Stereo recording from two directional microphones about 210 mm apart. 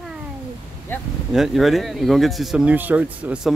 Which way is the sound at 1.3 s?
Centre (ahead or behind).